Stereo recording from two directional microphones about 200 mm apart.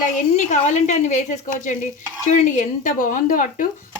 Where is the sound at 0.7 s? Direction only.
35° left (ahead or behind).